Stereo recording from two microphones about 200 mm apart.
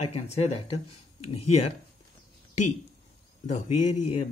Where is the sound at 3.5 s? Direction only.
35° left (ahead or behind).